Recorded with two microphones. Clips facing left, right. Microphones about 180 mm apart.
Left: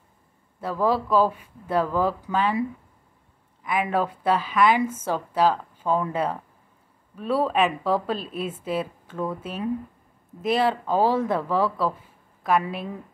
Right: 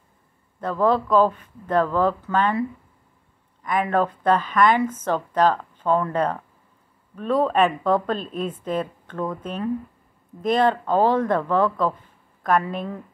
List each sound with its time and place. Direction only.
0.6 s speech: 5° left (ahead or behind)
3.6 s speech: 5° left (ahead or behind)